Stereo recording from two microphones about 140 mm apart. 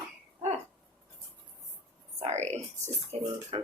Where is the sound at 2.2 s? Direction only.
50° right (ahead or behind).